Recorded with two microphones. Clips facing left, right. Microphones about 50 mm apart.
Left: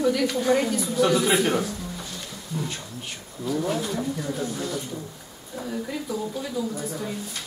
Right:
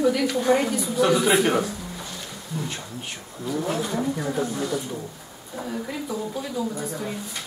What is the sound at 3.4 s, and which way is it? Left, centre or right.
A woman's voice, centre.